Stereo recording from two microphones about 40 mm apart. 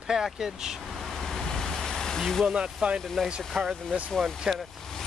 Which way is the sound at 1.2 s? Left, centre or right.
Centre.